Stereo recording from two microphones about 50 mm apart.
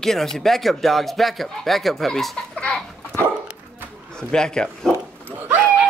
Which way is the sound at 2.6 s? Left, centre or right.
Centre.